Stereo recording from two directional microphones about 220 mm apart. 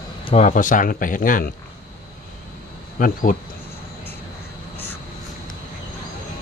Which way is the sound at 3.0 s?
35° left (ahead or behind).